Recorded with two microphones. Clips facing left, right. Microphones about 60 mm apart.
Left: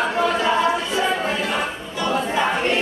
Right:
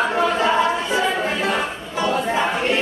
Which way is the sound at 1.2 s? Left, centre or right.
Centre.